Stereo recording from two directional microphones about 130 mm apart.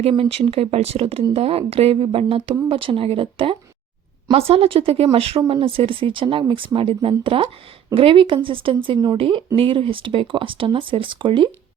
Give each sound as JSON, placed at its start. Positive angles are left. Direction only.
{"t": 0.0, "sound": "speech", "side_deg": -45}